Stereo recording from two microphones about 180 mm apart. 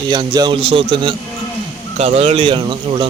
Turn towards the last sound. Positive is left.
turn(degrees=-25)  # may be behind; listen again after turning